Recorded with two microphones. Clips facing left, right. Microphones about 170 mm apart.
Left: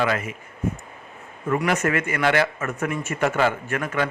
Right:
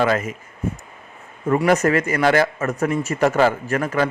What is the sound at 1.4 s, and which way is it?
A man's voice, 35° right (ahead or behind).